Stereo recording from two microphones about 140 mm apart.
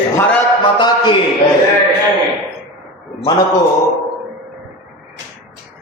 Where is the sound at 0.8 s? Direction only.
35° left (ahead or behind).